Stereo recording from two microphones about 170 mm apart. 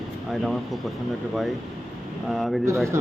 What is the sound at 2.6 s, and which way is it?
Speech, 15° right (ahead or behind).